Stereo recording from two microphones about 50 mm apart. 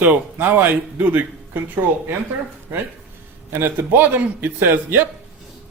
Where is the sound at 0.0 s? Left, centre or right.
Right.